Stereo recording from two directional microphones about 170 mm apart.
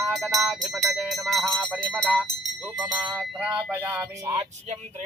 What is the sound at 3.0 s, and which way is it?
Speech, 10° right (ahead or behind).